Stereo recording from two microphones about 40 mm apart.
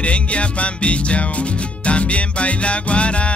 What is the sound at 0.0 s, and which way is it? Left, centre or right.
Music, left.